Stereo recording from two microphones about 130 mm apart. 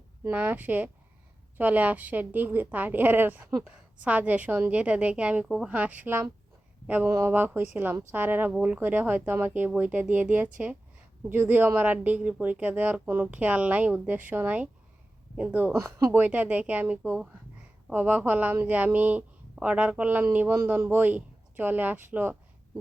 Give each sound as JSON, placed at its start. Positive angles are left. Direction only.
{"t": 0.3, "sound": "speech", "side_deg": -10}